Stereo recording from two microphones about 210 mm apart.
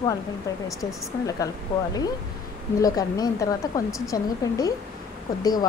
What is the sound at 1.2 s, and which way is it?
A woman's voice, 15° left (ahead or behind).